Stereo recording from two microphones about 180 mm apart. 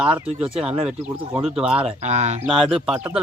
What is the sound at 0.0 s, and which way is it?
Speech, 5° right (ahead or behind).